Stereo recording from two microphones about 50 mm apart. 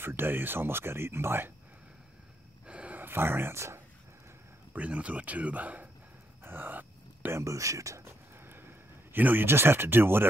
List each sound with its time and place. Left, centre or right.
0.0 s speech: right
2.6 s a sound: right
3.0 s speech: right
3.5 s speech: right
4.7 s speech: right
6.4 s a sound: right
7.3 s speech: right
8.5 s a sound: right
9.5 s speech: right